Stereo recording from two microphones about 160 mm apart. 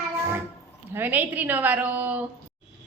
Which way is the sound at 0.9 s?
10° right (ahead or behind).